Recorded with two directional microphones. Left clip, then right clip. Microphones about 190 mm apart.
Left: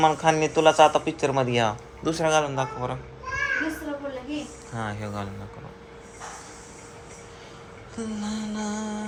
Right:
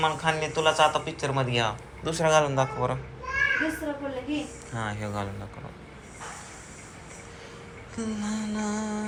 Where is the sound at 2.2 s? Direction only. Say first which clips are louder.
Right 2 dB; 20° left (ahead or behind).